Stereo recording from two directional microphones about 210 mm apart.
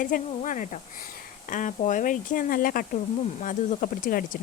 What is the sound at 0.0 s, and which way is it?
A woman's voice, 40° left (ahead or behind).